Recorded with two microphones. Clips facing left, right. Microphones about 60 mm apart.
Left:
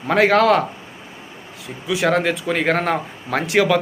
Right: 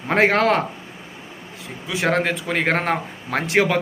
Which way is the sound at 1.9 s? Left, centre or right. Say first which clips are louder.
Left 2 dB; right.